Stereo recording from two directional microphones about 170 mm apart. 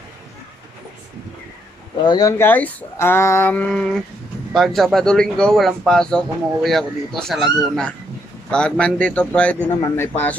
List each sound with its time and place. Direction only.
2.0 s a man's voice: 20° left (ahead or behind)
9.8 s speech: 20° left (ahead or behind)